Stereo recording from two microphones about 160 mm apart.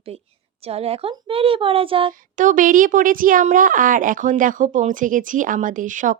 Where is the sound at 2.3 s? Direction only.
55° right (ahead or behind).